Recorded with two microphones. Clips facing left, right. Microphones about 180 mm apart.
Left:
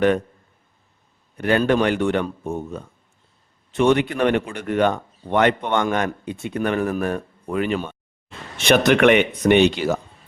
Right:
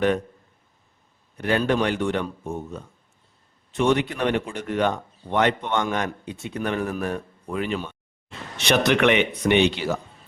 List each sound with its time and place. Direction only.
1.4 s speech: 60° left (ahead or behind)